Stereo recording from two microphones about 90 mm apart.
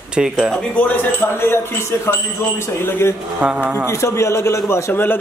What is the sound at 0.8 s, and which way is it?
Speech, 20° left (ahead or behind).